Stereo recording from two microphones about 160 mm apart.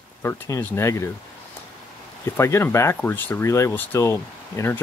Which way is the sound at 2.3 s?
15° left (ahead or behind).